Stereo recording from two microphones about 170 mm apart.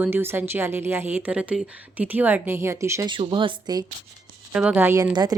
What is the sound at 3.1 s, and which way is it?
Speech, 30° right (ahead or behind).